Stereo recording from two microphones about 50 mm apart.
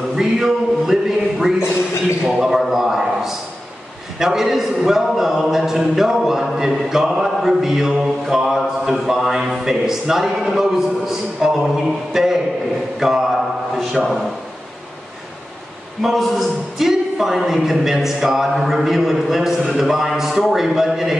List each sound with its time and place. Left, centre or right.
0.1 s a sound: centre
4.2 s speech: centre
16.0 s speech: centre